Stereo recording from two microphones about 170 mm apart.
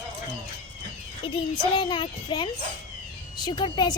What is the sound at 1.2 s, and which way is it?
Speech, 30° left (ahead or behind).